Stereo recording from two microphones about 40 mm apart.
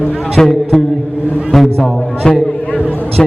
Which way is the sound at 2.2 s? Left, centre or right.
Centre.